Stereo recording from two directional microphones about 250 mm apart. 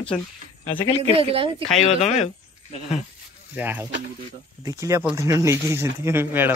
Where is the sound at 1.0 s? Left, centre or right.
Right.